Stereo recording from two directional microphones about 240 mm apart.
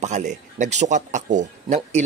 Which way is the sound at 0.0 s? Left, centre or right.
Right.